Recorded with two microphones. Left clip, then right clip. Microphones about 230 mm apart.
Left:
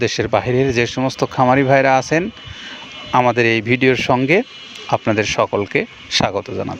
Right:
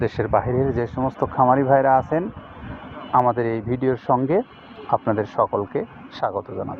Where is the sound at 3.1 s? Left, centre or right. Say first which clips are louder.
Left 5 dB; left.